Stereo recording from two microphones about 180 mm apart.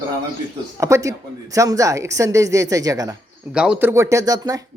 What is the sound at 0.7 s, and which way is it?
Speech, 15° right (ahead or behind).